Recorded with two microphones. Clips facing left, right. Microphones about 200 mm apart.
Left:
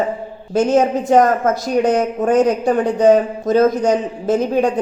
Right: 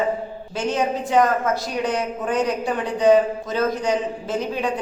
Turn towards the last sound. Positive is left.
turn(degrees=45)  # may be behind; listen again after turning